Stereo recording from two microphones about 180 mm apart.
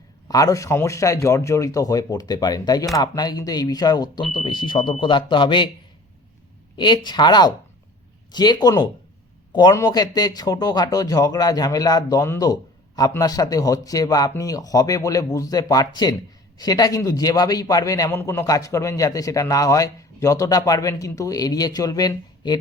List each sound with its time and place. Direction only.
0.3 s a man's voice: 20° left (ahead or behind)
6.7 s a man's voice: 25° left (ahead or behind)